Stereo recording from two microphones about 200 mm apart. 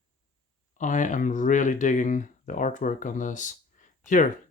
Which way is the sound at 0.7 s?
40° left (ahead or behind).